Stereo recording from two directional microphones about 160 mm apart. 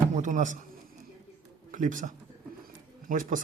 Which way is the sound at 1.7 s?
55° right (ahead or behind).